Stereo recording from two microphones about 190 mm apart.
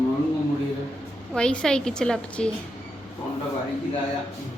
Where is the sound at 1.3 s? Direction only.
5° left (ahead or behind).